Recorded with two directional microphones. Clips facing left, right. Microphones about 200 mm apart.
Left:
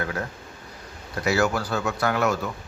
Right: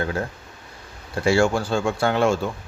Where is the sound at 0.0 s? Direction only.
30° right (ahead or behind).